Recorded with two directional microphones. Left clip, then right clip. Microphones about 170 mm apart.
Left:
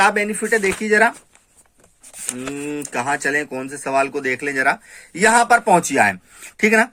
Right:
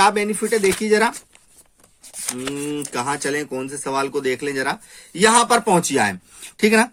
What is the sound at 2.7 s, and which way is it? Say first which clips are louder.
Speech: left 4 dB; 30° right (ahead or behind).